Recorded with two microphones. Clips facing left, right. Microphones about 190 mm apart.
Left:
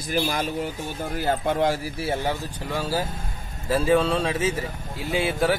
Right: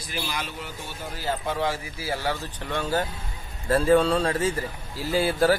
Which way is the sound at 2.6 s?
5° left (ahead or behind).